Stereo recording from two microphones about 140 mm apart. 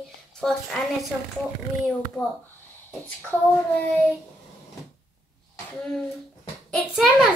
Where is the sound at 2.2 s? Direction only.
10° left (ahead or behind).